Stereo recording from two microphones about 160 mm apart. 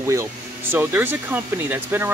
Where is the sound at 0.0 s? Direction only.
15° right (ahead or behind).